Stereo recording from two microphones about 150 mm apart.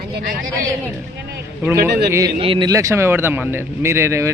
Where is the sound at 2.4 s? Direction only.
35° right (ahead or behind).